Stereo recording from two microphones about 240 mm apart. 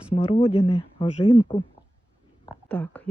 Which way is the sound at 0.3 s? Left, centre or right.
Left.